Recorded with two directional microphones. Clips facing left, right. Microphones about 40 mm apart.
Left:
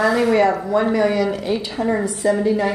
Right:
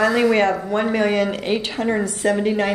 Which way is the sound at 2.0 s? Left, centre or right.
Right.